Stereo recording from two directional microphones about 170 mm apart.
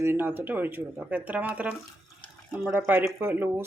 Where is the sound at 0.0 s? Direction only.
15° right (ahead or behind).